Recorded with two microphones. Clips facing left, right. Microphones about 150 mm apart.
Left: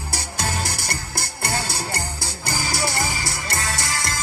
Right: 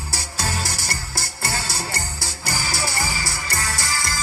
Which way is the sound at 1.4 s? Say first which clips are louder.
Left 2 dB; 15° left (ahead or behind).